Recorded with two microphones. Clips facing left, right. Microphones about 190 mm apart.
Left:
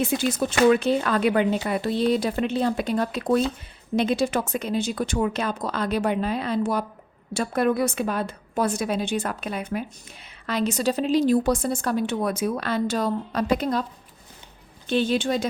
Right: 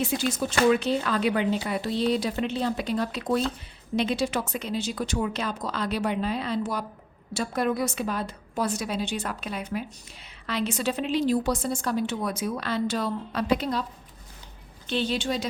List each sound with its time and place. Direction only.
0.0 s a woman's voice: 55° left (ahead or behind)
14.8 s a woman's voice: 50° left (ahead or behind)